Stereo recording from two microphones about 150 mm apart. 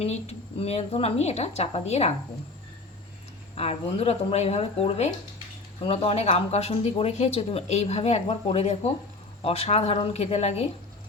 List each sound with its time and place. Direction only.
0.0 s speech: 45° left (ahead or behind)
3.5 s speech: 40° left (ahead or behind)